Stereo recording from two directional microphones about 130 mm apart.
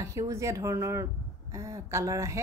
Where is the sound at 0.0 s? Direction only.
25° right (ahead or behind).